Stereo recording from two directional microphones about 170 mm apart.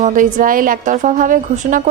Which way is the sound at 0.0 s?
50° right (ahead or behind).